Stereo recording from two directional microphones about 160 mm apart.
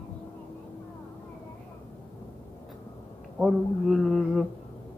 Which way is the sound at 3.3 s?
Centre (ahead or behind).